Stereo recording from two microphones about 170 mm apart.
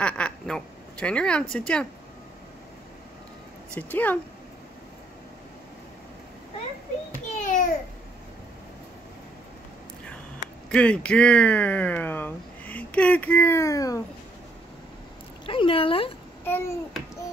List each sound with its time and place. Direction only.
0.0 s speech: 5° left (ahead or behind)
3.7 s speech: 10° left (ahead or behind)
7.4 s babbling: 50° left (ahead or behind)
10.7 s speech: 5° left (ahead or behind)
15.4 s a sound: 30° left (ahead or behind)
16.4 s babbling: 15° left (ahead or behind)